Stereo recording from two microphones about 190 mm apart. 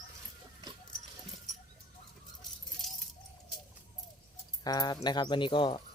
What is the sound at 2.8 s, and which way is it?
Keys jangling, centre (ahead or behind).